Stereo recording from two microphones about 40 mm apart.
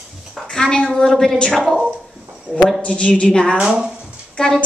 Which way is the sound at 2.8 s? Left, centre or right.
Left.